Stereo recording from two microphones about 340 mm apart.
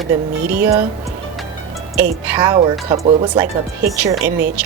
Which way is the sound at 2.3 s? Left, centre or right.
Centre.